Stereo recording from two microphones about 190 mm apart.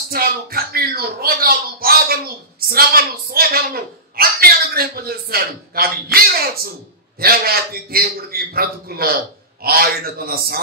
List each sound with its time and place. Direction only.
0.1 s speech: 50° right (ahead or behind)